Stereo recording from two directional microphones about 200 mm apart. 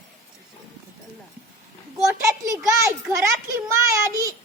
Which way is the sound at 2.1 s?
15° right (ahead or behind).